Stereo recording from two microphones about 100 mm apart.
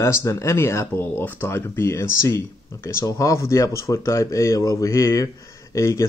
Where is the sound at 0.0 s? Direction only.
30° left (ahead or behind).